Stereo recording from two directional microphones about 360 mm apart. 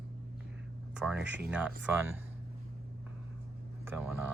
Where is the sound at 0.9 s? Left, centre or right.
Centre.